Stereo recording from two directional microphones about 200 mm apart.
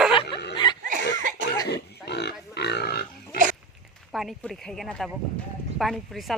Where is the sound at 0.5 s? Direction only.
25° left (ahead or behind).